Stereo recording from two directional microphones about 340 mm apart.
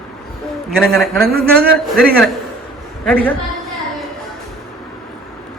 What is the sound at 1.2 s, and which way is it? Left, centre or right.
Speech, right.